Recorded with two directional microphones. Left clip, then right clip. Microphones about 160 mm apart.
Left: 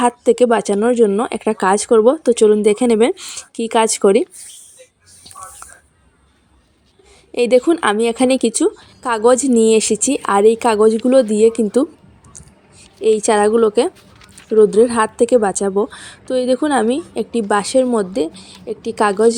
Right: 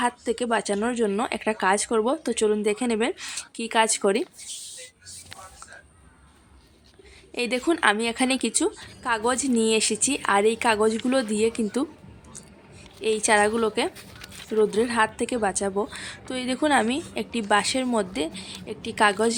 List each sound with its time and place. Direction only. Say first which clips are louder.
0.0 s speech: left 13 dB; 40° left (ahead or behind)
3.2 s a woman's voice: left 3 dB; 20° left (ahead or behind)
3.5 s speech: left 7 dB; 35° left (ahead or behind)
7.3 s a woman's voice: left 12 dB; 30° left (ahead or behind)
13.0 s a woman's voice: left 7 dB; 25° left (ahead or behind)